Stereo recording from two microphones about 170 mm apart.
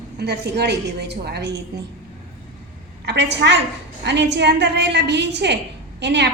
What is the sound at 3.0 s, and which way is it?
A woman's voice, 90° right.